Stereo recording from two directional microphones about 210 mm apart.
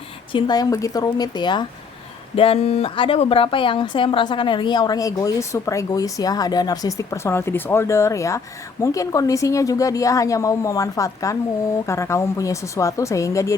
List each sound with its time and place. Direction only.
0.3 s a woman's voice: 20° left (ahead or behind)